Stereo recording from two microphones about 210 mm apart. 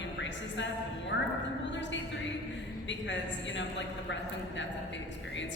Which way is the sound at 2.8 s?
60° left (ahead or behind).